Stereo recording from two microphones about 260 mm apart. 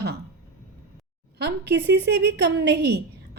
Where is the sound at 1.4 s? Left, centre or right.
Right.